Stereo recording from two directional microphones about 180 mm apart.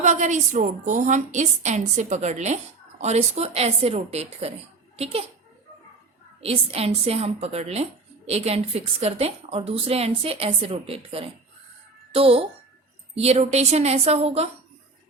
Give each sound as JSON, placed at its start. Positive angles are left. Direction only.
{"t": 0.0, "sound": "a woman's voice", "side_deg": -40}
{"t": 6.4, "sound": "a woman's voice", "side_deg": -35}